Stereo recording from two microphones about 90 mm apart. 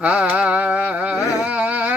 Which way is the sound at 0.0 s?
15° right (ahead or behind).